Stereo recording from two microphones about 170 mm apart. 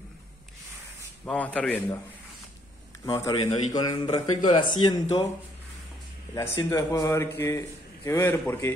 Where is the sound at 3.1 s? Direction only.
25° left (ahead or behind).